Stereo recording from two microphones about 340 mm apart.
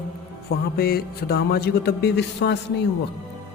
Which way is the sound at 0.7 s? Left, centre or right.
Left.